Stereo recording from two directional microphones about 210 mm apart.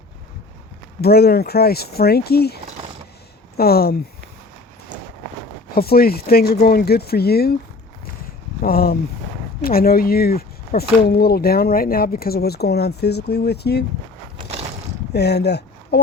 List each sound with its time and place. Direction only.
1.0 s speech: 50° left (ahead or behind)
3.6 s speech: 45° left (ahead or behind)
5.7 s speech: 45° left (ahead or behind)
8.6 s speech: 45° left (ahead or behind)
15.1 s speech: 50° left (ahead or behind)